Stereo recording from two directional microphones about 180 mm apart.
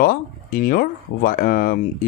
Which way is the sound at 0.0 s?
50° left (ahead or behind).